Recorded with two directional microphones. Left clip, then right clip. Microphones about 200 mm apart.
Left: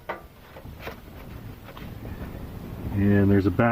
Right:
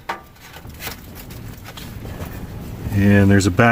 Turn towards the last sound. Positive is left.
turn(degrees=-60)  # may be behind; listen again after turning